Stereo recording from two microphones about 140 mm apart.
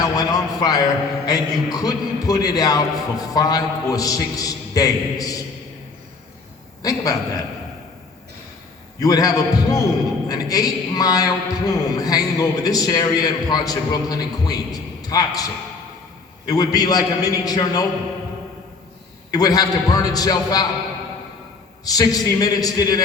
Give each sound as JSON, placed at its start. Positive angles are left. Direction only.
{"t": 0.0, "sound": "a man's voice", "side_deg": 25}
{"t": 6.8, "sound": "a man's voice", "side_deg": 25}
{"t": 9.0, "sound": "a man's voice", "side_deg": 25}
{"t": 16.5, "sound": "a man's voice", "side_deg": 25}
{"t": 19.3, "sound": "a man's voice", "side_deg": 25}
{"t": 21.8, "sound": "a man's voice", "side_deg": 25}